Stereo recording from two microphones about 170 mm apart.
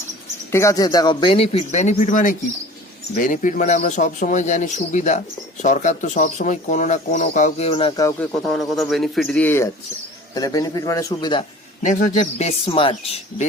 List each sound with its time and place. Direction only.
0.5 s a man's voice: 20° left (ahead or behind); by 7.9 s 35° left (ahead or behind)
8.5 s speech: centre (ahead or behind)
10.3 s a man's voice: 20° left (ahead or behind)
11.8 s speech: 50° left (ahead or behind); by 13.1 s 35° left (ahead or behind)